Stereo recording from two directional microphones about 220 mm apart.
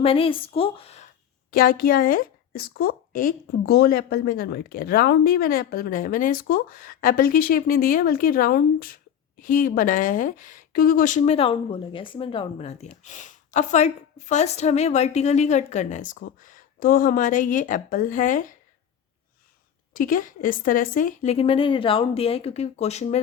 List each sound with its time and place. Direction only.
0.0 s speech: 25° left (ahead or behind)
1.5 s speech: 40° left (ahead or behind)
20.0 s speech: 40° left (ahead or behind)